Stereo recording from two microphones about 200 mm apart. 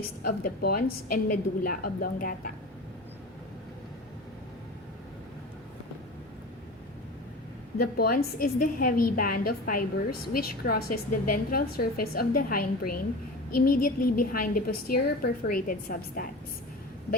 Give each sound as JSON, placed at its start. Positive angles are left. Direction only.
{"t": 0.0, "sound": "a woman's voice", "side_deg": 45}
{"t": 7.8, "sound": "a woman's voice", "side_deg": 50}